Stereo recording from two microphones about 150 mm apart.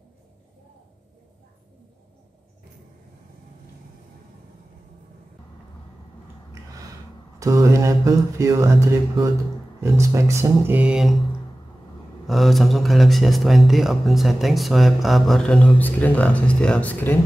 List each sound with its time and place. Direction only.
7.3 s speech: 20° right (ahead or behind); by 11.2 s 5° right (ahead or behind)
12.3 s speech: centre (ahead or behind)